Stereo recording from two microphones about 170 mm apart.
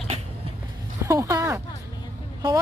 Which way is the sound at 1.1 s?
20° right (ahead or behind).